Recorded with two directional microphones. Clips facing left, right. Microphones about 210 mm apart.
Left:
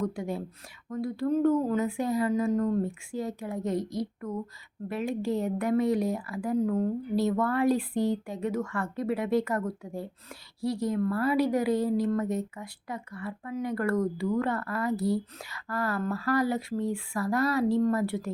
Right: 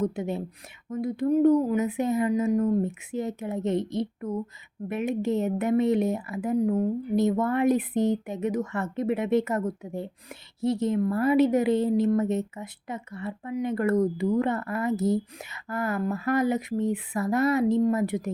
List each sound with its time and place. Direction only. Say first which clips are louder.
0.0 s speech: right 3 dB; 25° right (ahead or behind)